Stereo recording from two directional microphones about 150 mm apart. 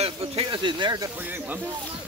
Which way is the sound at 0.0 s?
40° right (ahead or behind).